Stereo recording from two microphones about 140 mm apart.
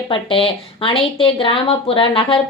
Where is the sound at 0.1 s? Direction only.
40° left (ahead or behind).